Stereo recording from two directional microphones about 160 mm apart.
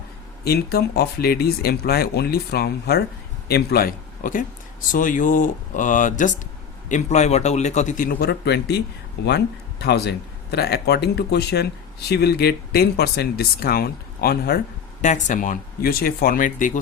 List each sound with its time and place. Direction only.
0.4 s a man's voice: 85° left
15.0 s speech: 50° left (ahead or behind)